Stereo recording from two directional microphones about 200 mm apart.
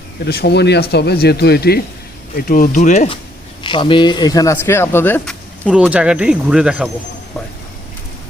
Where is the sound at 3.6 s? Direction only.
25° left (ahead or behind); by 6.8 s 5° right (ahead or behind).